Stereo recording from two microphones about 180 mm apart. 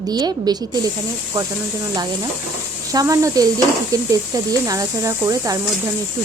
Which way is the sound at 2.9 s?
20° right (ahead or behind).